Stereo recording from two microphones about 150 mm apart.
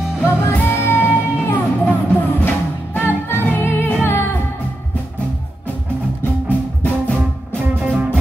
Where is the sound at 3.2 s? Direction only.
15° left (ahead or behind).